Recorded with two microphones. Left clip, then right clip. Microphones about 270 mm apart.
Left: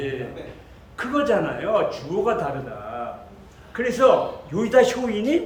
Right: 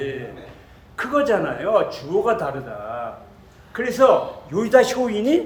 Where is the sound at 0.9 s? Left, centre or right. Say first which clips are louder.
Right 2 dB; centre.